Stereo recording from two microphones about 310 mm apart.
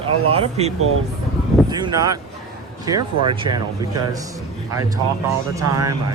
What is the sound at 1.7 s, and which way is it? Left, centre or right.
Speech, centre.